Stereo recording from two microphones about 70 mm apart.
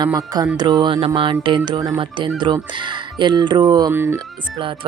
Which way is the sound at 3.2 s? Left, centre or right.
Right.